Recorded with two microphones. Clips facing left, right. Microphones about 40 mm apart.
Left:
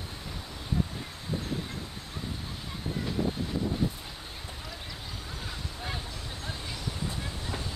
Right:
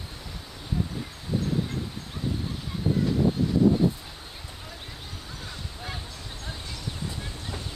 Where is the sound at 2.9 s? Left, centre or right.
Right.